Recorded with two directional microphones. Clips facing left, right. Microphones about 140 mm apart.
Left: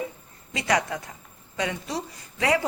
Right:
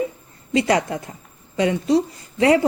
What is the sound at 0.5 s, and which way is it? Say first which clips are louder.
A woman's voice: right 6 dB; 30° right (ahead or behind).